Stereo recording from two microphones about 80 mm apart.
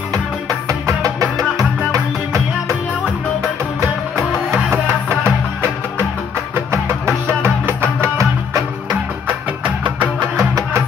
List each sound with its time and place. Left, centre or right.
0.7 s music: right
4.2 s music: centre
6.5 s music: right